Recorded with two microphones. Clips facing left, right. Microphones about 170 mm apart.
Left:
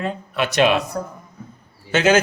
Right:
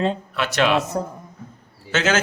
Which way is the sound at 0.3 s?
15° left (ahead or behind).